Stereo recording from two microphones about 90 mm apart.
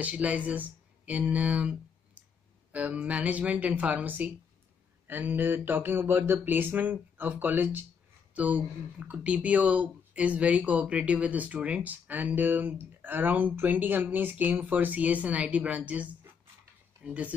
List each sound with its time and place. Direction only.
0.0 s speech: 15° right (ahead or behind)
5.0 s a sound: 20° right (ahead or behind)
8.4 s speech: 15° right (ahead or behind)